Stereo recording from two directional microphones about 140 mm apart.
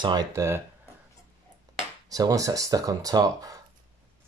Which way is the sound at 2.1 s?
25° right (ahead or behind).